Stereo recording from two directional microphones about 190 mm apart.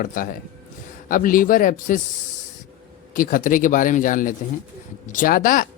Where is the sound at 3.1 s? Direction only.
45° left (ahead or behind).